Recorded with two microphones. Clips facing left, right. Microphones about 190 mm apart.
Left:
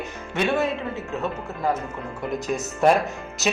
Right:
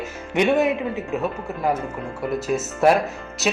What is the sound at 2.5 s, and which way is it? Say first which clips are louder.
Speech: right 1 dB; 5° right (ahead or behind).